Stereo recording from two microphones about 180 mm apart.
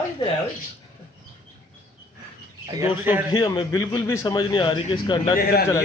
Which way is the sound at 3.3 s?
25° left (ahead or behind).